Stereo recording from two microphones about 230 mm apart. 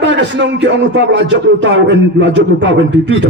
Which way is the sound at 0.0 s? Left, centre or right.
Right.